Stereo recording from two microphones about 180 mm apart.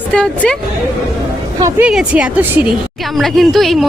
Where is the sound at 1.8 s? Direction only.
5° right (ahead or behind).